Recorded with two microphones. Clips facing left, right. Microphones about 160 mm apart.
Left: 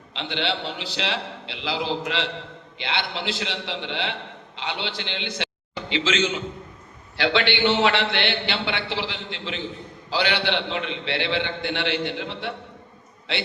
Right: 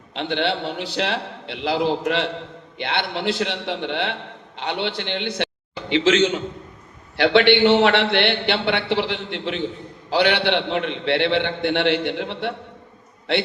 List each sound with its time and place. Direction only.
0.1 s a man's voice: 50° right (ahead or behind)